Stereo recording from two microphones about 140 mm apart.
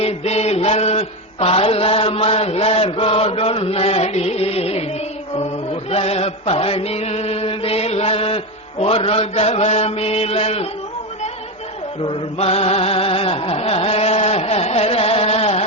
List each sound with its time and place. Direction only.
0.0 s mantra: 50° left (ahead or behind)
5.9 s chant: 45° left (ahead or behind)
8.8 s mantra: 45° left (ahead or behind)
12.0 s chant: 45° left (ahead or behind)